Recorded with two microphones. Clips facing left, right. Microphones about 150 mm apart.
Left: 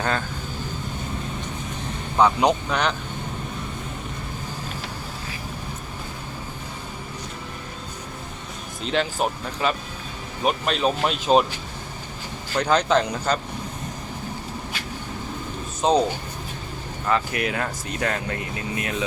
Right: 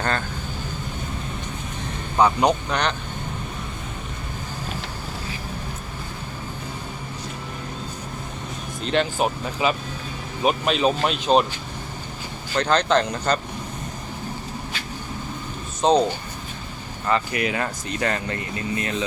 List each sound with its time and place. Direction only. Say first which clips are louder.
0.0 s speech: even; 5° left (ahead or behind)
2.1 s speech: even; centre (ahead or behind)
8.8 s speech: right 2 dB; centre (ahead or behind)
12.5 s speech: even; 10° left (ahead or behind)
15.8 s speech: right 2 dB; centre (ahead or behind)
17.1 s speech: right 1 dB; centre (ahead or behind)